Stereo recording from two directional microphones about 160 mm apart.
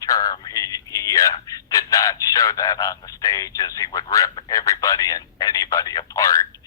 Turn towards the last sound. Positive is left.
turn(degrees=20)  # may be behind; listen again after turning